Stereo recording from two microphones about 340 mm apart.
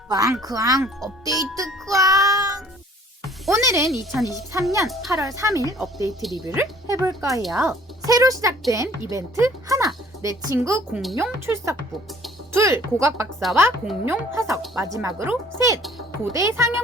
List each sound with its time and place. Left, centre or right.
0.1 s speech: centre
1.2 s music: centre
3.4 s speech: centre